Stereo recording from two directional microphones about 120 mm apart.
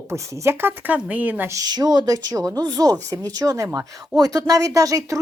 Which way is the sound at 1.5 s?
30° right (ahead or behind).